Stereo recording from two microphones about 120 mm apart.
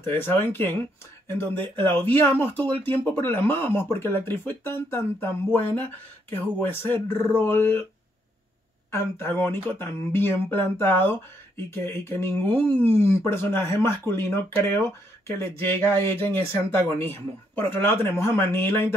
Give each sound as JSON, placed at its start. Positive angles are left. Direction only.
{"t": 0.0, "sound": "speech", "side_deg": 20}
{"t": 8.9, "sound": "speech", "side_deg": 20}